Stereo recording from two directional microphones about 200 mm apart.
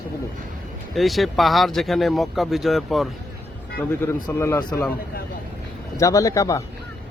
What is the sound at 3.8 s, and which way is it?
Speech, 10° left (ahead or behind).